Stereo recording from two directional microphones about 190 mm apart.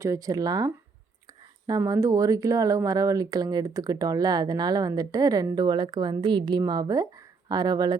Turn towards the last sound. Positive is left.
turn(degrees=-20)  # may be behind; listen again after turning